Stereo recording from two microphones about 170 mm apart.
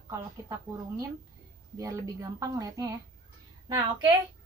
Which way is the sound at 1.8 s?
20° right (ahead or behind).